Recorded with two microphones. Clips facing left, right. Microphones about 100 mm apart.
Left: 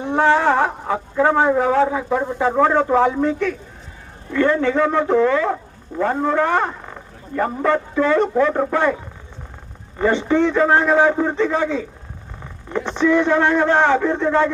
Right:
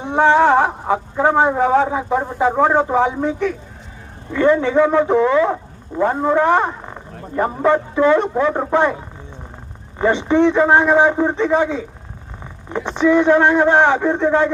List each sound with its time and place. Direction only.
0.0 s a man's voice: 15° right (ahead or behind)
10.0 s a man's voice: 20° right (ahead or behind)